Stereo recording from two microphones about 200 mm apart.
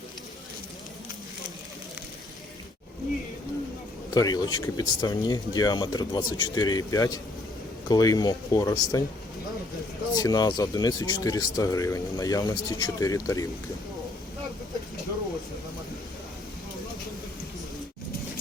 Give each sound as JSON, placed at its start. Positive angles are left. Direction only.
{"t": 4.1, "sound": "speech", "side_deg": 20}
{"t": 10.2, "sound": "speech", "side_deg": 20}